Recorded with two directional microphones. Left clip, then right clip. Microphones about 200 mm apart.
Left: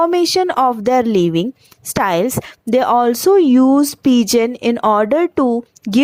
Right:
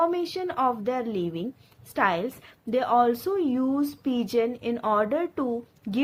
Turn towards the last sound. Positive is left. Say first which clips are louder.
# left 13 dB
turn(degrees=45)  # may be behind; listen again after turning